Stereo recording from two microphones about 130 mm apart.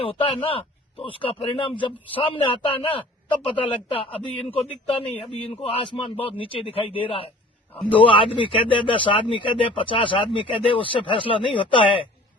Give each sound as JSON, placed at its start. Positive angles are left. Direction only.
{"t": 0.0, "sound": "a man's voice", "side_deg": 45}